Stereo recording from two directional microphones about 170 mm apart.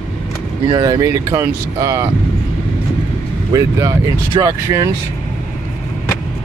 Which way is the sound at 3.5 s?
20° right (ahead or behind).